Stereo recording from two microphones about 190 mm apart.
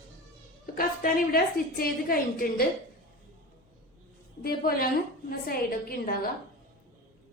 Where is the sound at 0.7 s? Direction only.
50° left (ahead or behind).